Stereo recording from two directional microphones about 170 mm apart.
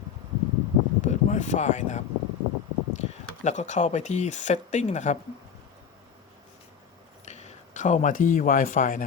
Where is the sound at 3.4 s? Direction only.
45° left (ahead or behind).